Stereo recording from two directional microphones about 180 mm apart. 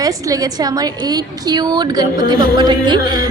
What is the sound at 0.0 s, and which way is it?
A woman's voice, 20° right (ahead or behind).